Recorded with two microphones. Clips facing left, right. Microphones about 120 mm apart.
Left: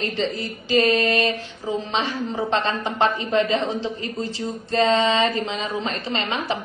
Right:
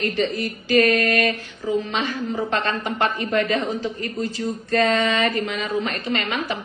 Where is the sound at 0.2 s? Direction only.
25° left (ahead or behind).